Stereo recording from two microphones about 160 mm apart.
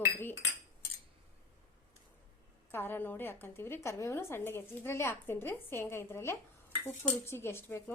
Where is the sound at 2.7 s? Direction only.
15° left (ahead or behind).